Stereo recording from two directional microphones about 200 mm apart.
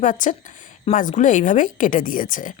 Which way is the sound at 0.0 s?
40° left (ahead or behind).